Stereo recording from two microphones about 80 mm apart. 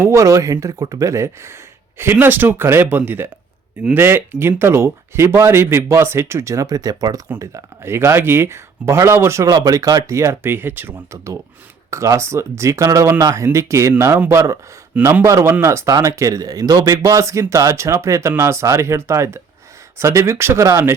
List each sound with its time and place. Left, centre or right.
0.0 s speech: right
7.3 s speech: right
11.9 s speech: right